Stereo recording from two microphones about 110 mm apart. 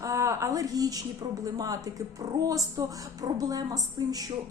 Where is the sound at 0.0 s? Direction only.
25° right (ahead or behind).